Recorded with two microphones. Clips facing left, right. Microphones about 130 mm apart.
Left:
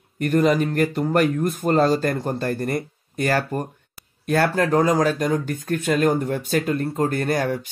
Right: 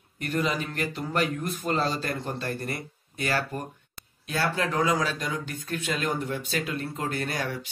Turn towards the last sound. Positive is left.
turn(degrees=50)  # may be behind; listen again after turning